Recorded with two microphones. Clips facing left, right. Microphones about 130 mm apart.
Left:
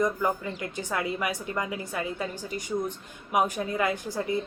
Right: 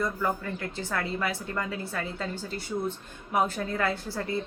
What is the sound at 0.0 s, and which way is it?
A woman's voice, 15° left (ahead or behind).